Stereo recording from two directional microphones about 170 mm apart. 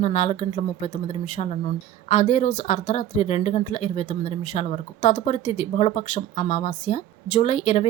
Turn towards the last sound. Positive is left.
turn(degrees=40)  # may be behind; listen again after turning